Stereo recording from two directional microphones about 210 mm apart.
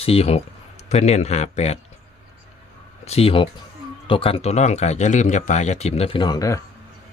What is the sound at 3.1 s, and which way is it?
A man's voice, 30° left (ahead or behind).